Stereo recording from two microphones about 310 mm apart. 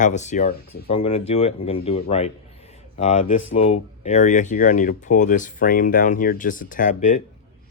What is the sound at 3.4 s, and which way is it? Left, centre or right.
Speech, left.